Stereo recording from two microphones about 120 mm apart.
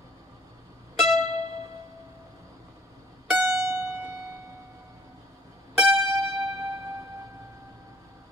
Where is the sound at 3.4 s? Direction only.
20° right (ahead or behind).